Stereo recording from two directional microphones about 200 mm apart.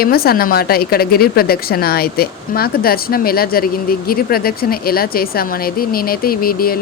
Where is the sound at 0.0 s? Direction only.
50° left (ahead or behind).